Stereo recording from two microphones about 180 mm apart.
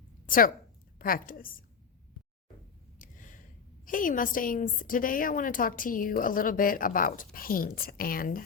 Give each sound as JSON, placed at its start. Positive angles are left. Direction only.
{"t": 0.3, "sound": "a woman's voice", "side_deg": 50}
{"t": 3.0, "sound": "a sound", "side_deg": 45}
{"t": 3.8, "sound": "a woman's voice", "side_deg": 50}